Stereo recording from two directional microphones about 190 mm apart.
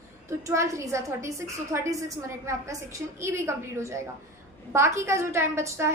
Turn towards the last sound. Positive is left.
turn(degrees=-15)  # may be behind; listen again after turning